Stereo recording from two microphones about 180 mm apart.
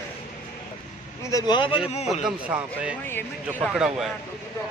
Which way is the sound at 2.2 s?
5° right (ahead or behind).